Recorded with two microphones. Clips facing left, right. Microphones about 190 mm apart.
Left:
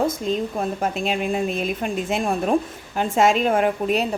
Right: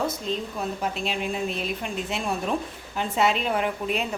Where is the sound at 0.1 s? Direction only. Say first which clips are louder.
Left 6 dB; 50° left (ahead or behind).